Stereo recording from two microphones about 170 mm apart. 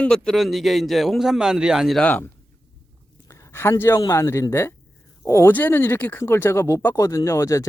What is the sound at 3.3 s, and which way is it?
Speech, 15° left (ahead or behind).